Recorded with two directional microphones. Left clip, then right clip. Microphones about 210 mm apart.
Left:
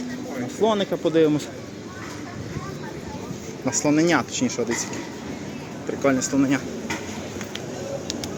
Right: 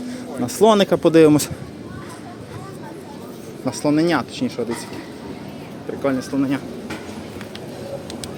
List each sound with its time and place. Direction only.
0.4 s speech: 45° right (ahead or behind)
3.8 s speech: 10° right (ahead or behind)
6.0 s speech: 5° right (ahead or behind)